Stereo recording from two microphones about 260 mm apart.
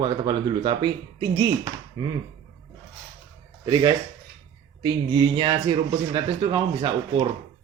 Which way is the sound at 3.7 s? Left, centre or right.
Centre.